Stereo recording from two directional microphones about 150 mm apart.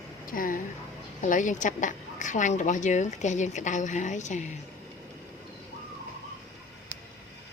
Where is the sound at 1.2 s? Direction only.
55° left (ahead or behind).